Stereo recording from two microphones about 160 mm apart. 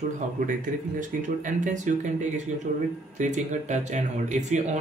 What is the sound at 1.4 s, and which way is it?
Speech, 55° right (ahead or behind).